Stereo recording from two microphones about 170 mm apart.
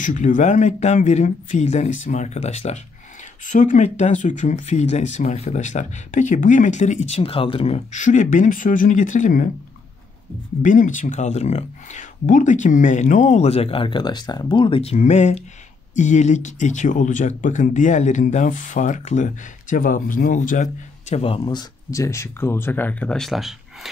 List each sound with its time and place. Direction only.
0.0 s speech: 50° left (ahead or behind)
10.6 s speech: 50° left (ahead or behind); by 23.9 s centre (ahead or behind)